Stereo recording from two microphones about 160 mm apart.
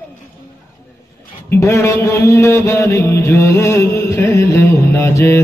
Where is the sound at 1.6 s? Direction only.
15° left (ahead or behind).